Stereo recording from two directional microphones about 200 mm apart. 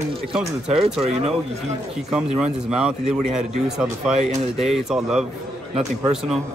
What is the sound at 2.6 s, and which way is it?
Speech, 5° right (ahead or behind).